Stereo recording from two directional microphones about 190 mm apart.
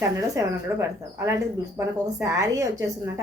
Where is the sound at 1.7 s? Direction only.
15° right (ahead or behind).